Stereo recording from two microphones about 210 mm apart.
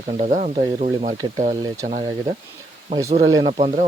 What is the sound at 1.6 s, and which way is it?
Speech, 15° right (ahead or behind).